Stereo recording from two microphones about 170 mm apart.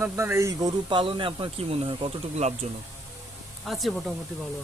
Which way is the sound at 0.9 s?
30° right (ahead or behind).